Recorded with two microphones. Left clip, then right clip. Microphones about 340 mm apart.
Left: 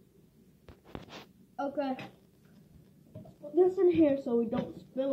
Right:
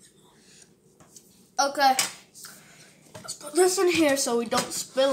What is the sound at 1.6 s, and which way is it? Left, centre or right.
Speech, centre.